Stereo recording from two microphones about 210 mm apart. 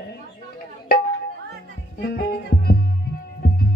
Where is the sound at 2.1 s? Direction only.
45° left (ahead or behind).